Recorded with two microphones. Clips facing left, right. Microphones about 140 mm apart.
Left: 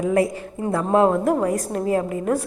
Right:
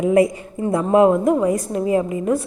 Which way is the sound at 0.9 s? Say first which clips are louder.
Right 3 dB; 10° right (ahead or behind).